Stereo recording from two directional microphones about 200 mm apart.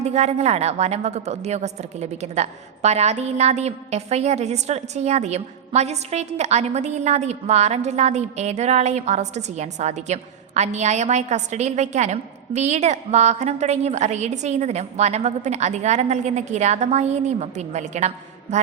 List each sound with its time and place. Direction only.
0.0 s a woman's voice: 35° right (ahead or behind)